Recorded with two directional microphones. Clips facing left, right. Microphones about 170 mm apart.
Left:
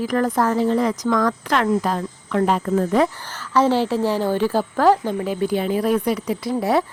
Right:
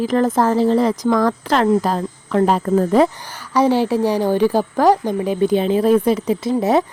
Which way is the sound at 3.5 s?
15° right (ahead or behind).